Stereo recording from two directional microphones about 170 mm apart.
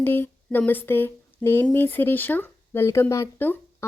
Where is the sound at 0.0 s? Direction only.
10° left (ahead or behind).